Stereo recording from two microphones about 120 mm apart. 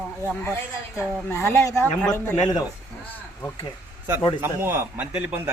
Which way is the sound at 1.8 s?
10° left (ahead or behind).